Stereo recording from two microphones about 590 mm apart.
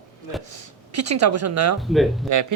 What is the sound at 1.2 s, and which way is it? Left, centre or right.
Speech, right.